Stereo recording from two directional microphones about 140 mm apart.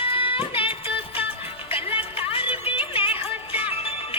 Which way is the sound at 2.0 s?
40° left (ahead or behind).